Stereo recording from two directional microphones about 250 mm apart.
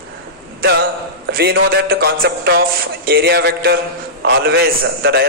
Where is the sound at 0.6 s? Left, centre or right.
Right.